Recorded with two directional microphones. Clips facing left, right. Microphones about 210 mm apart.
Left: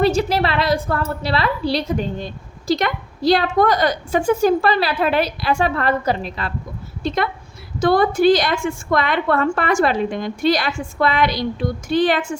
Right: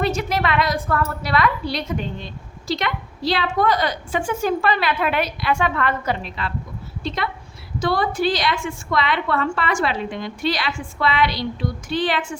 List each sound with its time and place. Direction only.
0.0 s a woman's voice: 30° left (ahead or behind)
7.8 s a woman's voice: 50° left (ahead or behind)